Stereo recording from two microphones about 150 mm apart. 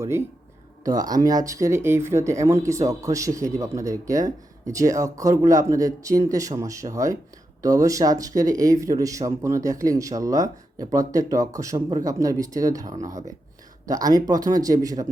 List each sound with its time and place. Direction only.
0.9 s speech: 25° right (ahead or behind)